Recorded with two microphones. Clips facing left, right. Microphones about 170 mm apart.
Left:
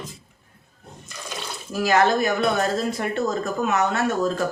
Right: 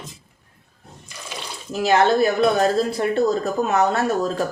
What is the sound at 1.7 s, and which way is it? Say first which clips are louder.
Speech: right 2 dB; 30° right (ahead or behind).